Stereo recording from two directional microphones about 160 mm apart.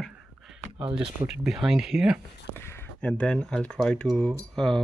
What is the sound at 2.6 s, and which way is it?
Speech, 15° left (ahead or behind).